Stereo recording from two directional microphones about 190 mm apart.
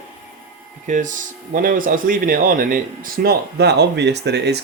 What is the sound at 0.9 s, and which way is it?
Speech, 45° right (ahead or behind).